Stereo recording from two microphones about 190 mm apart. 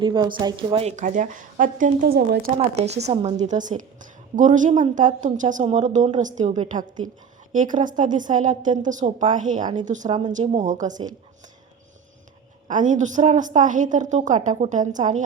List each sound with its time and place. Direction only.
0.0 s a woman's voice: 25° right (ahead or behind); by 2.4 s 55° right (ahead or behind)
2.8 s a woman's voice: 35° right (ahead or behind)
10.1 s speech: 25° right (ahead or behind)
10.3 s a woman's voice: 35° right (ahead or behind)
12.6 s a woman's voice: 40° right (ahead or behind)